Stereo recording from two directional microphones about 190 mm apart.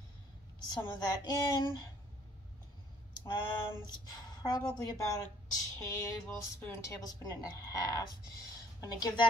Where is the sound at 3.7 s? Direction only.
20° left (ahead or behind).